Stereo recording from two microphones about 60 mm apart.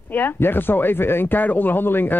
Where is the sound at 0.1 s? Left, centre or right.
Left.